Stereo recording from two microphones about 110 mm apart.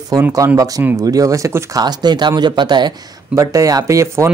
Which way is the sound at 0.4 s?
30° right (ahead or behind).